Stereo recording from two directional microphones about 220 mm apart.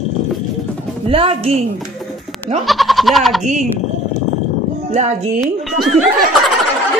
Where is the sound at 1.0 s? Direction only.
25° right (ahead or behind).